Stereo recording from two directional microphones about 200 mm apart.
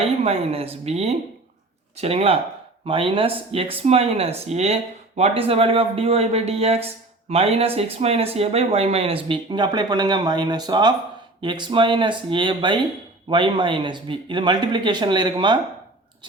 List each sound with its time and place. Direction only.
0.0 s speech: 30° right (ahead or behind)